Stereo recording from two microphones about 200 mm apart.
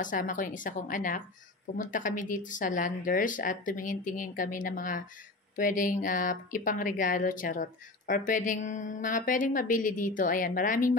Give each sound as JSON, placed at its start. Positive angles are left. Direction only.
{"t": 0.0, "sound": "speech", "side_deg": 40}